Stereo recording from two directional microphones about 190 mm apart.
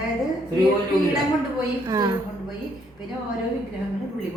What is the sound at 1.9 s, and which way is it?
Speech, 15° right (ahead or behind).